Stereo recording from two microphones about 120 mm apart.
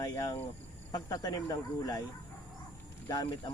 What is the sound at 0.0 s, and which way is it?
Speech, 30° left (ahead or behind).